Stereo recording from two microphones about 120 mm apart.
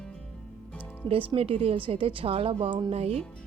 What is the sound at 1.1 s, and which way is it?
Speech, 50° right (ahead or behind).